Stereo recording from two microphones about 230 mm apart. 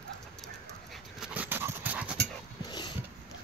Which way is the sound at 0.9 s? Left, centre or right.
Centre.